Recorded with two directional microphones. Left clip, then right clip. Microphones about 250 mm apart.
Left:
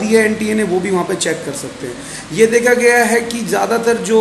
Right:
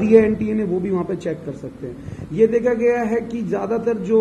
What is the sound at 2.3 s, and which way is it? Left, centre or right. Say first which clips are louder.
A man's voice: left 6 dB; centre.